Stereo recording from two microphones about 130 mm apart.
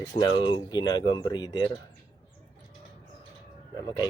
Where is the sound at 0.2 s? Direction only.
35° left (ahead or behind).